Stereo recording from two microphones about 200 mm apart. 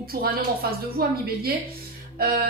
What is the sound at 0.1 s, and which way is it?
Speech, 50° right (ahead or behind).